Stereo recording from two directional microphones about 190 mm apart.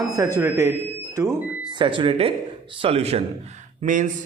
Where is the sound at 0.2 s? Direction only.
15° right (ahead or behind).